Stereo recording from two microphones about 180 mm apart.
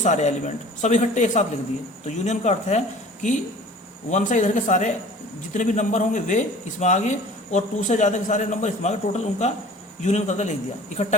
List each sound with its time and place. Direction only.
0.0 s a man's voice: 40° left (ahead or behind)